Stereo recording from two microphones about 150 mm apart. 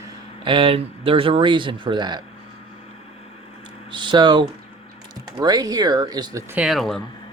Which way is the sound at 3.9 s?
30° right (ahead or behind).